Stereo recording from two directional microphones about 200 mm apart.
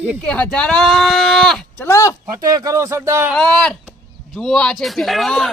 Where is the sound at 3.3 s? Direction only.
5° left (ahead or behind).